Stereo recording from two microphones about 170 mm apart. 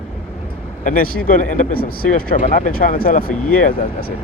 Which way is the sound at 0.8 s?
55° left (ahead or behind).